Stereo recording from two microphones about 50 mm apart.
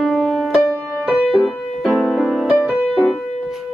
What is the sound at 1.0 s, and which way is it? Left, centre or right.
Music, centre.